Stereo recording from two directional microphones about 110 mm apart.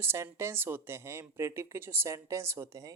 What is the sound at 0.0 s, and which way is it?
Speech, 20° right (ahead or behind).